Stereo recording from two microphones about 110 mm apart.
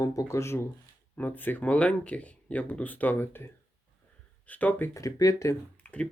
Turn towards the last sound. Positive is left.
turn(degrees=10)  # may be behind; listen again after turning